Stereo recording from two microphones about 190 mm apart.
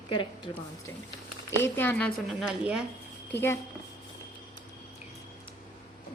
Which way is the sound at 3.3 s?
15° left (ahead or behind).